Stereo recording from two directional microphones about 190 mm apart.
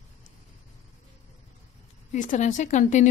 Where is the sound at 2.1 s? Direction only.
40° left (ahead or behind).